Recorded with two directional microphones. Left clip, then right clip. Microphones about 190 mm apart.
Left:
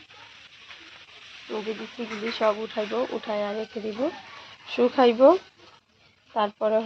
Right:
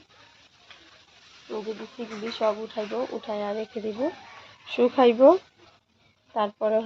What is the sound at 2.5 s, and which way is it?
Speech, 20° left (ahead or behind).